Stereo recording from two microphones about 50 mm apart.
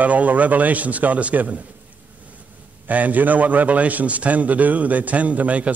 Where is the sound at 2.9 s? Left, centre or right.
Right.